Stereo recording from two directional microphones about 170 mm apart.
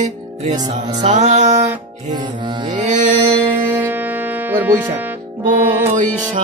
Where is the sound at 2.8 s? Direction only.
45° right (ahead or behind).